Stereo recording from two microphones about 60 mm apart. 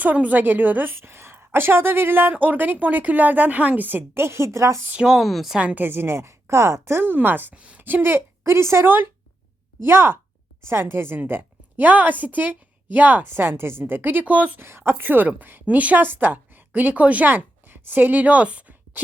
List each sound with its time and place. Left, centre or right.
0.0 s a woman's voice: right
5.0 s speech: centre
5.7 s a woman's voice: right
7.5 s a woman's voice: centre
7.8 s a woman's voice: right
14.6 s a woman's voice: right